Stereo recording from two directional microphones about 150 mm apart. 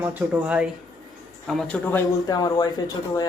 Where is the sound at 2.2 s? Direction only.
25° left (ahead or behind).